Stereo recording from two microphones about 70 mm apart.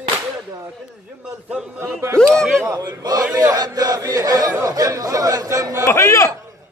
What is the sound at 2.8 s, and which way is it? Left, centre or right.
Speech, right.